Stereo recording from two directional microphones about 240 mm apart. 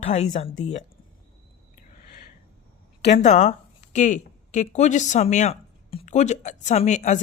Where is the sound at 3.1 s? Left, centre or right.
Left.